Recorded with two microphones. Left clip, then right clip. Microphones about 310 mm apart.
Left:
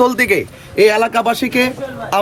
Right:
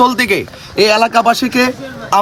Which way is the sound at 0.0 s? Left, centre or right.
Centre.